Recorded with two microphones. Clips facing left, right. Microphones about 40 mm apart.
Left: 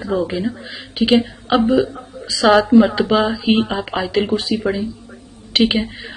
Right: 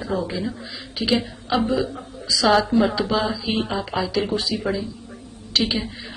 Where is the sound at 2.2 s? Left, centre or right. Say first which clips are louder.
Left 4 dB; left.